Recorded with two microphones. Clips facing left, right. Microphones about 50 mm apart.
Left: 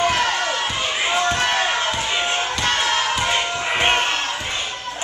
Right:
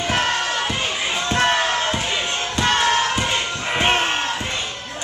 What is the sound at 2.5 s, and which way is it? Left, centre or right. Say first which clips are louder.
Music: right 2 dB; right.